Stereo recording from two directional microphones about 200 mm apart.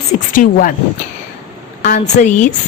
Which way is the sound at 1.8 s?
35° left (ahead or behind).